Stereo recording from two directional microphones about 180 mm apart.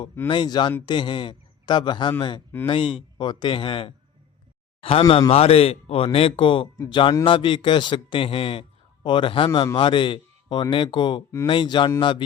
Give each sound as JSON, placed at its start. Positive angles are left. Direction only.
{"t": 0.3, "sound": "a man's voice", "side_deg": 25}